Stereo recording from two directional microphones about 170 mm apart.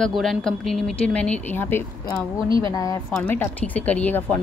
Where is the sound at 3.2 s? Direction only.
10° left (ahead or behind).